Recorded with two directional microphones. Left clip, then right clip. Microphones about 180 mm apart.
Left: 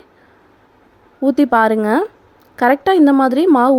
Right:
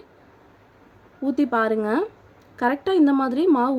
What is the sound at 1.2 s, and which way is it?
A woman's voice, 45° left (ahead or behind).